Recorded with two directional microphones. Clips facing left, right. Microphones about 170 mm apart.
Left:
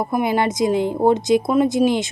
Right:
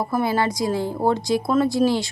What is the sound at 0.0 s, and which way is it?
A woman's voice, 15° left (ahead or behind).